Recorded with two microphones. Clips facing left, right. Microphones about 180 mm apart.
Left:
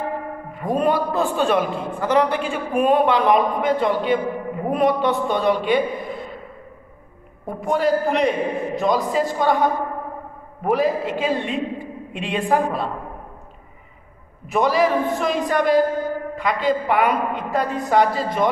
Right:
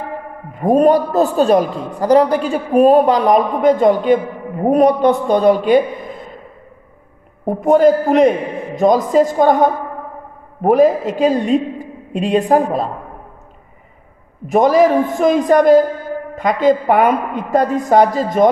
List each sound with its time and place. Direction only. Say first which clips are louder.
0.6 s a man's voice: right 8 dB; 45° right (ahead or behind)
7.4 s a woman's voice: right 10 dB; 45° right (ahead or behind)
14.5 s a woman's voice: right 7 dB; 45° right (ahead or behind)